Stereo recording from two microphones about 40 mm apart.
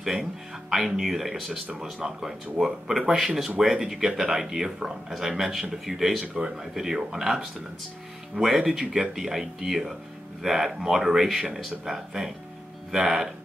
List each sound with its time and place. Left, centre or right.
0.2 s speech: centre
6.3 s speech: centre